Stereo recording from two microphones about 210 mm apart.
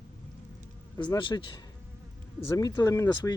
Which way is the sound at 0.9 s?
20° left (ahead or behind).